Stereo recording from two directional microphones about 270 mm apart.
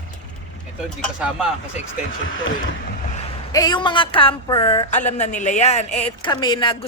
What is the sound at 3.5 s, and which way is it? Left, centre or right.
A woman's voice, centre.